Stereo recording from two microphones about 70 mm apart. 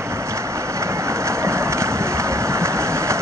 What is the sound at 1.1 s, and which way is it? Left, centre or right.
Vehicle, right.